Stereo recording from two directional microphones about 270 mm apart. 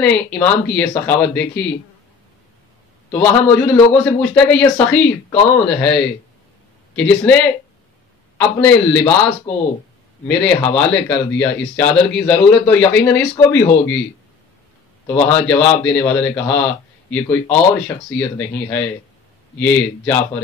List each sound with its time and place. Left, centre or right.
0.0 s a man's voice: centre
3.1 s a man's voice: centre
15.0 s a man's voice: centre